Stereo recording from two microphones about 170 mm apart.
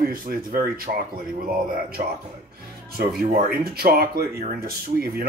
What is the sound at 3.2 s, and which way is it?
Speech, 60° right (ahead or behind).